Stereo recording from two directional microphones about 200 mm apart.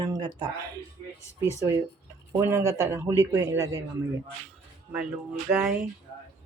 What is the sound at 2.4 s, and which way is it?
Speech, 15° right (ahead or behind).